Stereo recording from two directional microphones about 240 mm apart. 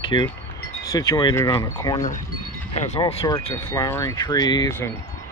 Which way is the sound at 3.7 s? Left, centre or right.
Centre.